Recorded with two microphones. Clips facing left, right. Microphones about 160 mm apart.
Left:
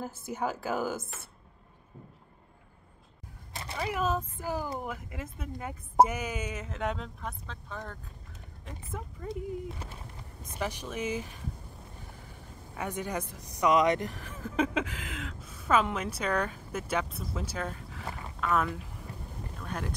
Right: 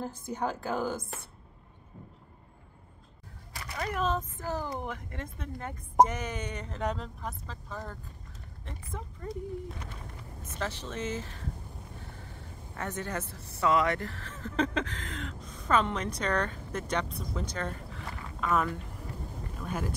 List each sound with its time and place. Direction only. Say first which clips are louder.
0.0 s speech: even; 5° left (ahead or behind)
3.7 s speech: even; 5° left (ahead or behind)
10.4 s speech: left 1 dB; 15° left (ahead or behind)
12.7 s speech: left 1 dB; 10° left (ahead or behind); by 19.9 s 5° right (ahead or behind)